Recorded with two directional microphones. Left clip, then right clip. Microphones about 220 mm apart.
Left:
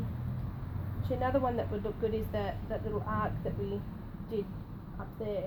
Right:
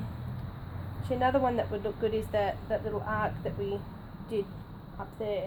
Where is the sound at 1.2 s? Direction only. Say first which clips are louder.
Right 4 dB; 25° right (ahead or behind).